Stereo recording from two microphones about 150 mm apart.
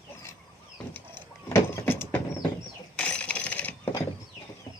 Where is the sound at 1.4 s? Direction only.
20° left (ahead or behind).